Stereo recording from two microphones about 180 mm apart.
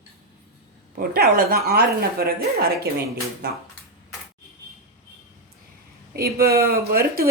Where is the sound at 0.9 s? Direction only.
55° right (ahead or behind).